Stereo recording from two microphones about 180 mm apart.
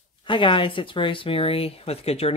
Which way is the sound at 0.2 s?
25° left (ahead or behind).